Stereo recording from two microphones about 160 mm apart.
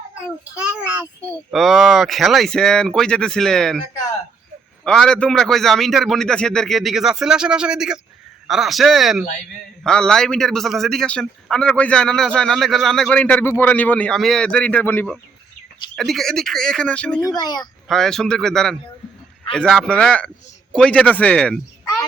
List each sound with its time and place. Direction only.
0.5 s a child's voice: 10° right (ahead or behind)
4.8 s a man's voice: 5° left (ahead or behind)
17.2 s speech: 25° left (ahead or behind)
17.8 s a man's voice: 5° left (ahead or behind)